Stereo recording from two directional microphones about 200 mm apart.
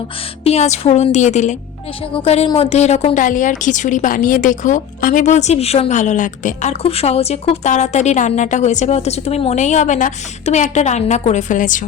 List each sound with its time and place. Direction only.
0.4 s a woman's voice: 35° left (ahead or behind)